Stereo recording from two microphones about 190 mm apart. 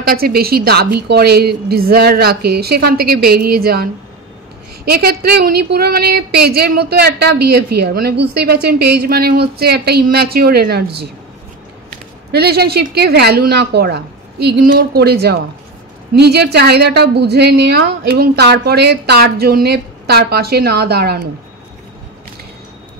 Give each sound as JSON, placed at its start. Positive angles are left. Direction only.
{"t": 0.0, "sound": "a woman's voice", "side_deg": -50}
{"t": 12.3, "sound": "a woman's voice", "side_deg": -55}